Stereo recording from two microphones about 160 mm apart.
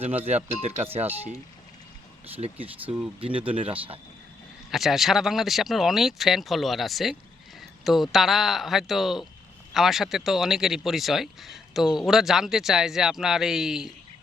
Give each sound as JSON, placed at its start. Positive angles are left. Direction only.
{"t": 0.3, "sound": "speech", "side_deg": -40}
{"t": 2.6, "sound": "speech", "side_deg": -10}
{"t": 3.2, "sound": "speech", "side_deg": -35}
{"t": 4.7, "sound": "speech", "side_deg": 0}